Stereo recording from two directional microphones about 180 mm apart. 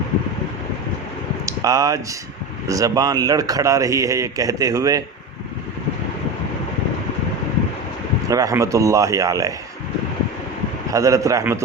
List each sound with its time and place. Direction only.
1.5 s a man's voice: 20° right (ahead or behind)
8.3 s a man's voice: 20° right (ahead or behind)
10.9 s a man's voice: 20° right (ahead or behind)